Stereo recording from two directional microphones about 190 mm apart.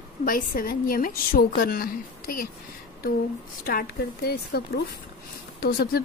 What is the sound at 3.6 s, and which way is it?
A woman's voice, 50° left (ahead or behind).